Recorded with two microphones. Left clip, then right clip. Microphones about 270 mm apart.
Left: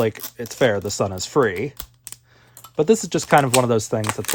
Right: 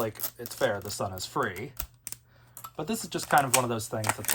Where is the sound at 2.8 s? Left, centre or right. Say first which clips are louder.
Left 16 dB; left.